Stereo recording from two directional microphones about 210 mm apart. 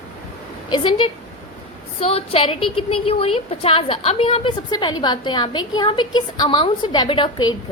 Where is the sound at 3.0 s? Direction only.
25° left (ahead or behind).